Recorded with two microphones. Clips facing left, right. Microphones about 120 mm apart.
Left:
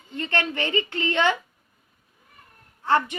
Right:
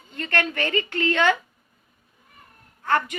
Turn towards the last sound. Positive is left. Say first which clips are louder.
# left 1 dB
turn(degrees=25)  # may be behind; listen again after turning